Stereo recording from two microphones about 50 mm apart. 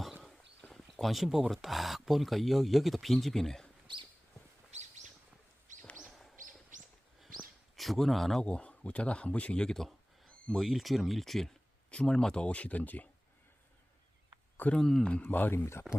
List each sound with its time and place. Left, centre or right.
0.0 s horse: centre
0.7 s a sound: centre
1.2 s speech: centre
7.8 s speech: centre
8.4 s speech: left
10.5 s speech: centre; by 13.1 s left
14.8 s speech: centre
15.2 s speech: left
15.5 s speech: left